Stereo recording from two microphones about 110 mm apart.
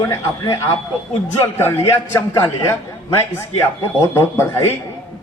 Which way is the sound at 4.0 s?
25° left (ahead or behind).